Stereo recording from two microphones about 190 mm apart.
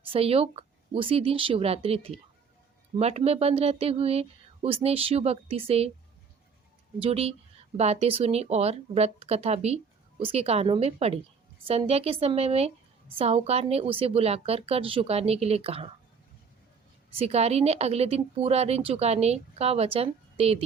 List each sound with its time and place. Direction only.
0.0 s speech: 30° right (ahead or behind)
7.0 s speech: 30° right (ahead or behind)
17.2 s speech: 35° right (ahead or behind)